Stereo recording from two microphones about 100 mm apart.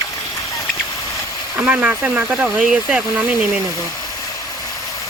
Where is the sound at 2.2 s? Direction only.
5° right (ahead or behind).